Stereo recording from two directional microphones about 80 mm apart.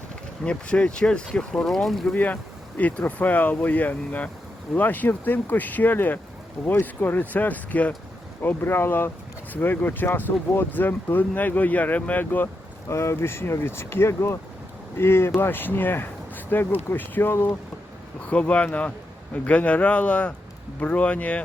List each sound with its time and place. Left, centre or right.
0.4 s a man's voice: centre
2.1 s speech: centre
12.9 s speech: left
18.3 s a man's voice: centre